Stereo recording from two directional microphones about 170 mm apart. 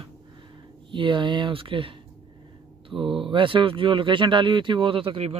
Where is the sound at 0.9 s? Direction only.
30° right (ahead or behind).